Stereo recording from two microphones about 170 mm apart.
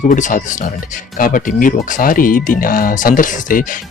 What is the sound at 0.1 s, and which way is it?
Speech, 50° left (ahead or behind).